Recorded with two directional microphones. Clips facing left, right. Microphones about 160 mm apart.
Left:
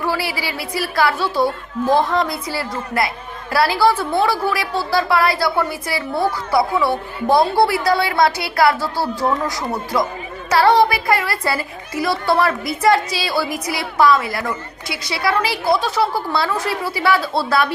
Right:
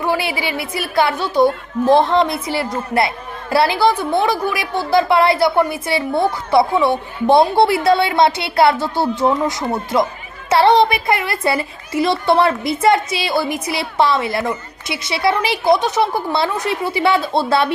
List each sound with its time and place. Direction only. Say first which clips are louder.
0.0 s a woman's voice: right 3 dB; 20° right (ahead or behind)